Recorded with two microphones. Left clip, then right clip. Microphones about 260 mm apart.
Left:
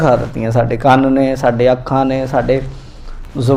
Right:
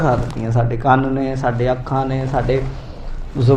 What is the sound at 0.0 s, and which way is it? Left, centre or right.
A man's voice, left.